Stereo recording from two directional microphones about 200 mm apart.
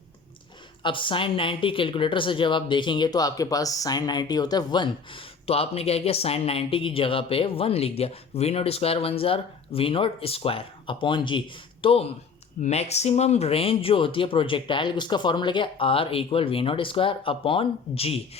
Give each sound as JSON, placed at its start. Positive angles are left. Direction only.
{"t": 0.8, "sound": "speech", "side_deg": 25}